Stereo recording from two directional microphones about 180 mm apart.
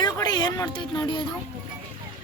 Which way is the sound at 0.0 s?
20° left (ahead or behind).